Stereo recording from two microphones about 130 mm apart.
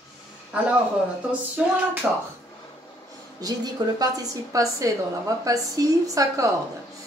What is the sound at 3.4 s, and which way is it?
A woman's voice, 30° right (ahead or behind).